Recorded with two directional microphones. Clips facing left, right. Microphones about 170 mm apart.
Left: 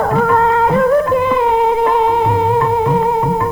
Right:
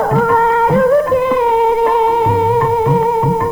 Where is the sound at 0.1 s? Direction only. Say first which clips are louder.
Even; 20° right (ahead or behind).